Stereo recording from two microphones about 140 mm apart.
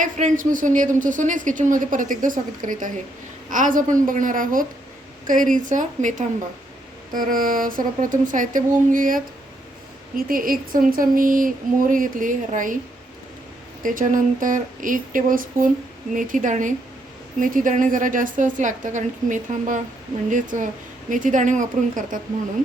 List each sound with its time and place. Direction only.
0.0 s a woman's voice: 65° right (ahead or behind)
7.1 s a woman's voice: 75° right (ahead or behind)
10.2 s a woman's voice: 90° right; by 12.8 s 70° right (ahead or behind)
13.8 s a woman's voice: 70° right (ahead or behind)